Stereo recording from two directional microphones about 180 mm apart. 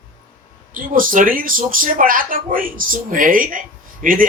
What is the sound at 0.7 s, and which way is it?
Speech, 50° right (ahead or behind).